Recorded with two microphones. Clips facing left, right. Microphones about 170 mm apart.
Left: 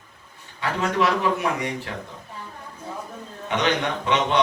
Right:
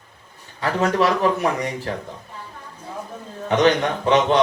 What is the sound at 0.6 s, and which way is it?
A man's voice, 40° right (ahead or behind).